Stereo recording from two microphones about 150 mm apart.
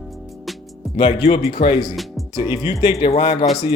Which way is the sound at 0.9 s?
35° left (ahead or behind).